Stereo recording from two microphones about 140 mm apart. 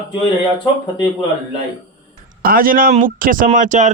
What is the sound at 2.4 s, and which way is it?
Speech, 90° right.